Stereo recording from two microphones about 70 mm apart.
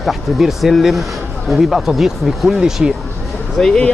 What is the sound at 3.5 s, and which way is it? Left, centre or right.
Speech, centre.